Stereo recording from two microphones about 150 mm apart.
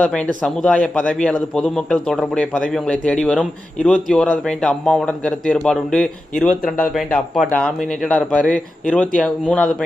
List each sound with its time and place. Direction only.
0.0 s a man's voice: 5° left (ahead or behind)